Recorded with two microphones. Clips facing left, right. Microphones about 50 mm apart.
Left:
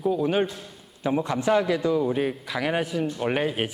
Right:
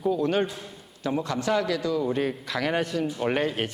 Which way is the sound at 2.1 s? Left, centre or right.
Centre.